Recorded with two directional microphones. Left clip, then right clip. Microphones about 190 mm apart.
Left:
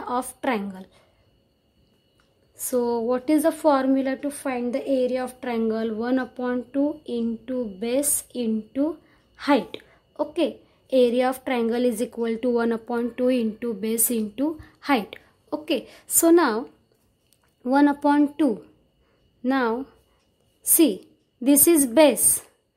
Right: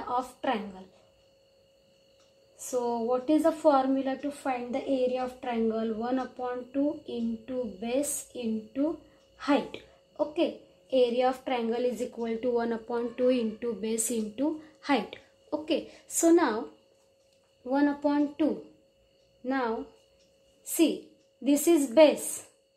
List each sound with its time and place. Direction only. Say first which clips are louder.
0.1 s a woman's voice: left 4 dB; 50° left (ahead or behind)
2.7 s a woman's voice: left 5 dB; 45° left (ahead or behind)
17.6 s a woman's voice: left 8 dB; 55° left (ahead or behind)
21.5 s a woman's voice: left 6 dB; 50° left (ahead or behind)